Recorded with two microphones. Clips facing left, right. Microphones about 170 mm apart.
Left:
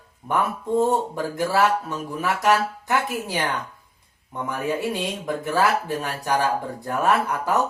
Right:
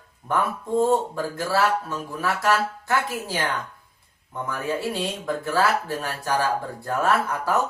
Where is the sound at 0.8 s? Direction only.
20° left (ahead or behind).